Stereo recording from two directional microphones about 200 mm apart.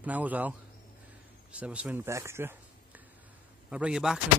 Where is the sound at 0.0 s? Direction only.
10° right (ahead or behind).